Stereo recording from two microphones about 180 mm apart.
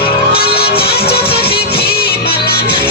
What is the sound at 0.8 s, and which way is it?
Music, 60° left (ahead or behind).